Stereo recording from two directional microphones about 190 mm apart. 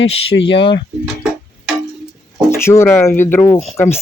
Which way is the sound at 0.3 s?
75° left (ahead or behind).